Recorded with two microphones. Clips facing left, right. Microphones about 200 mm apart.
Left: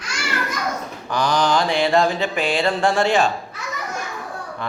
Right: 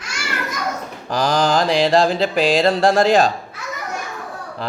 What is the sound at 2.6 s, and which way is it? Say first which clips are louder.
Speech: right 4 dB; 35° right (ahead or behind).